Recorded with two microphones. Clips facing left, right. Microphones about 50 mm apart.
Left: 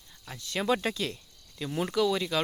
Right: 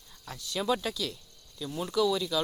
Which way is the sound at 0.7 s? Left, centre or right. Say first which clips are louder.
Left 2 dB; left.